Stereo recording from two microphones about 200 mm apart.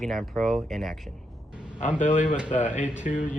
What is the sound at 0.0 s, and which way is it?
Speech, centre (ahead or behind).